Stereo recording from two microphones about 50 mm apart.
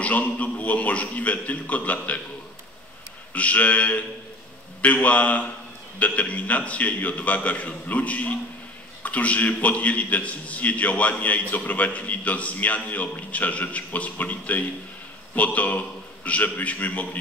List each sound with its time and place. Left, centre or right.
0.0 s a man's voice: left
3.3 s a man's voice: left